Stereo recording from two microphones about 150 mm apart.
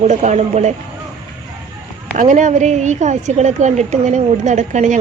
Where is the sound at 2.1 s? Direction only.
55° right (ahead or behind).